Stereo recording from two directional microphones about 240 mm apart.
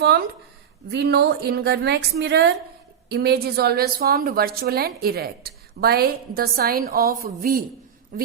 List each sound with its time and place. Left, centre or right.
0.0 s a woman's voice: right